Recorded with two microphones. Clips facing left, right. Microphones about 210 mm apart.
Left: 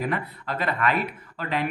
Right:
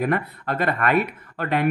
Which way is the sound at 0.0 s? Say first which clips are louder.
Right 5 dB; 55° right (ahead or behind).